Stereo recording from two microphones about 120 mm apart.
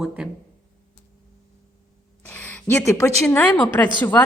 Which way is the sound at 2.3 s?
15° left (ahead or behind).